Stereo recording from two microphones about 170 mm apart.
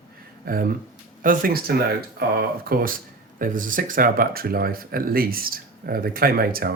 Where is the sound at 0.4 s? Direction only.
55° right (ahead or behind).